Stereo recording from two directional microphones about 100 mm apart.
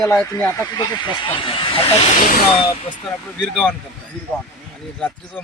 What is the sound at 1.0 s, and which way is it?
Speech, 55° left (ahead or behind).